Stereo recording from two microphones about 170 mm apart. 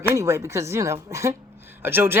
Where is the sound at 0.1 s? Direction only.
15° right (ahead or behind).